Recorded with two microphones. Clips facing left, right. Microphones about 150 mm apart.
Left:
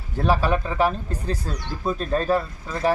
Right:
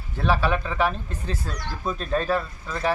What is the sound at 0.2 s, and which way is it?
Speech, 40° left (ahead or behind).